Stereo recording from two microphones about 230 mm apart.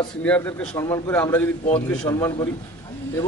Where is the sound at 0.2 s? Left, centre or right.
Centre.